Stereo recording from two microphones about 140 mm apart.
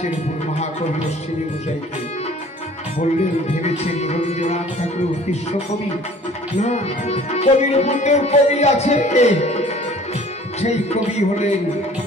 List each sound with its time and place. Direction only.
3.2 s music: 50° left (ahead or behind)
6.6 s music: 50° left (ahead or behind)